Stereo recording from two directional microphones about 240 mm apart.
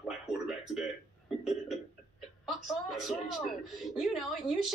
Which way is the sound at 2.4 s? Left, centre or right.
Centre.